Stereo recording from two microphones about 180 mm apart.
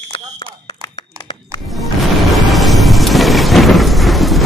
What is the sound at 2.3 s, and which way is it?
Thunder, centre (ahead or behind).